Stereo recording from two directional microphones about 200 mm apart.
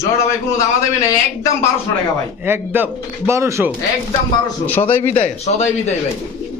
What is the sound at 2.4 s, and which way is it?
Speech, 10° right (ahead or behind).